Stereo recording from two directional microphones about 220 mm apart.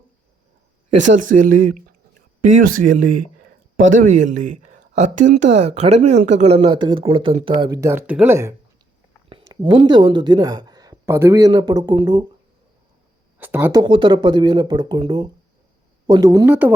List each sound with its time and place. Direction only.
0.9 s speech: 35° right (ahead or behind); by 12.2 s 20° right (ahead or behind)
13.4 s speech: 10° right (ahead or behind)